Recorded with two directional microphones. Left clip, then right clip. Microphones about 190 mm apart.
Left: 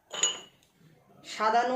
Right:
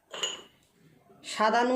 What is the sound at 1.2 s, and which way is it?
Speech, 55° right (ahead or behind).